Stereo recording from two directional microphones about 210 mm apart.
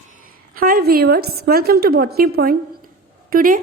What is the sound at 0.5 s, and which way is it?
A woman's voice, 45° right (ahead or behind).